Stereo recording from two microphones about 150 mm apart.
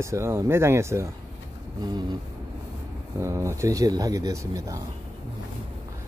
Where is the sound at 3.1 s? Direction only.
20° right (ahead or behind).